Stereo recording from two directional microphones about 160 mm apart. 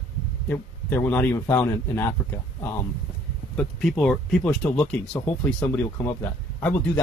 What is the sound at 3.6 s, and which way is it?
Speech, 5° left (ahead or behind).